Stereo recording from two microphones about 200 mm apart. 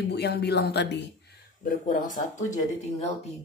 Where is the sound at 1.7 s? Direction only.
45° left (ahead or behind).